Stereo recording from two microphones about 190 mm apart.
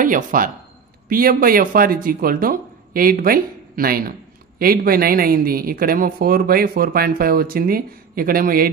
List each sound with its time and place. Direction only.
0.0 s speech: 45° right (ahead or behind)